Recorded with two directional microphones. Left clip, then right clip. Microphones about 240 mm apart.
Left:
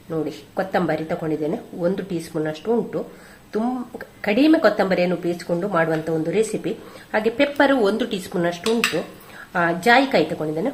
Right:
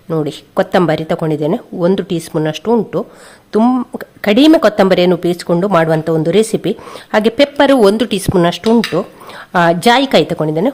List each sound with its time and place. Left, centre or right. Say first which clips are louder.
0.1 s speech: right 8 dB; right
9.0 s speech: right 9 dB; right